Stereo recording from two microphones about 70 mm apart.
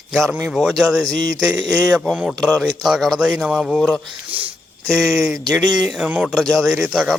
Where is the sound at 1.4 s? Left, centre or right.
Right.